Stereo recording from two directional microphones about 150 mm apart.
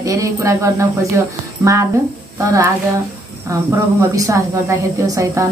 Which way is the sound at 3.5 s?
20° right (ahead or behind).